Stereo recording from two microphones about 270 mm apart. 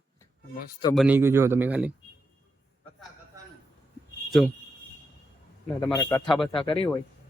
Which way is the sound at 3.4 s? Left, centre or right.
Centre.